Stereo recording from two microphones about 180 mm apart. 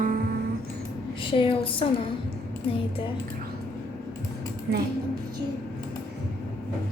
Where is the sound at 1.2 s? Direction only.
30° left (ahead or behind).